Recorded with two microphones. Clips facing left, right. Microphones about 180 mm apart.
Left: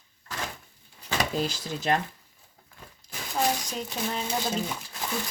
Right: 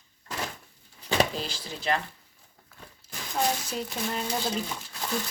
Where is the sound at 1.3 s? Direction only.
45° left (ahead or behind).